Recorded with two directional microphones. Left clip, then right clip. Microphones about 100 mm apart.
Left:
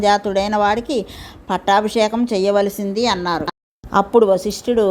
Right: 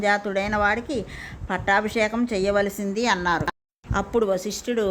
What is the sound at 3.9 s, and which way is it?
Speech, 40° left (ahead or behind).